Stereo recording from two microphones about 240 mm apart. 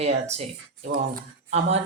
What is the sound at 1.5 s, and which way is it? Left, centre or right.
Speech, right.